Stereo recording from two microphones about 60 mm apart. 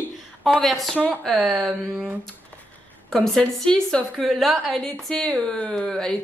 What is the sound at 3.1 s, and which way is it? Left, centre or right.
A woman's voice, centre.